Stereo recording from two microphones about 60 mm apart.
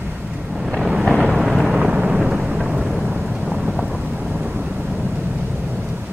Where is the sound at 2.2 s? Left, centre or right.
Centre.